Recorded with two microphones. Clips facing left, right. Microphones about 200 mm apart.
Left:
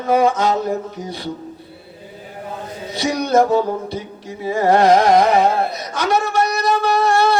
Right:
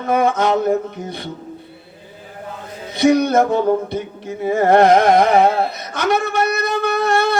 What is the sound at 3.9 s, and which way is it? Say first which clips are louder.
Carnatic music: right 3 dB; 55° right (ahead or behind).